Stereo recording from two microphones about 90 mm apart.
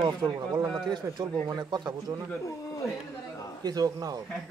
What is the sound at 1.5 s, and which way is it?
Speech, 50° right (ahead or behind).